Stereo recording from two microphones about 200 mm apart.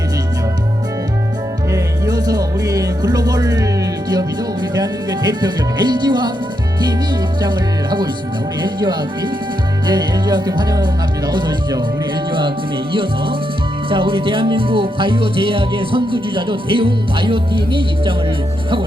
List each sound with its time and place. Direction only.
1.7 s music: 20° right (ahead or behind)
4.7 s music: 20° right (ahead or behind)
12.9 s music: 25° right (ahead or behind)